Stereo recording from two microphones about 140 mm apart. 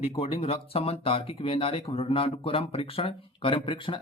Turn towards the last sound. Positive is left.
turn(degrees=35)  # may be behind; listen again after turning